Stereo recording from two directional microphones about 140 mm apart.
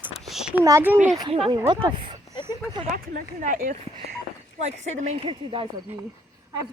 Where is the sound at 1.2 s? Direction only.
35° right (ahead or behind).